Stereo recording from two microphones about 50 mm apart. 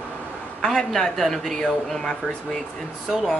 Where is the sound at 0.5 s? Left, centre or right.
Centre.